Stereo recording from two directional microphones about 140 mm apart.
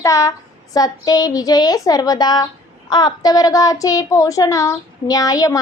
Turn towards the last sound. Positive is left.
turn(degrees=25)  # may be behind; listen again after turning